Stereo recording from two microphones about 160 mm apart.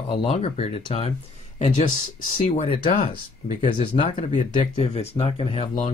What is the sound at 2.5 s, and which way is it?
Speech, 35° left (ahead or behind).